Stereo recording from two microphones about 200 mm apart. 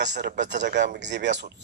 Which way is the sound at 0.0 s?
55° right (ahead or behind).